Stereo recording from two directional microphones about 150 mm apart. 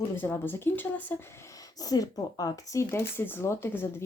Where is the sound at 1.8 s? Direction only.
25° left (ahead or behind).